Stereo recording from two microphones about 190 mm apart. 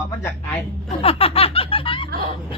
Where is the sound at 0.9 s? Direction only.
30° left (ahead or behind).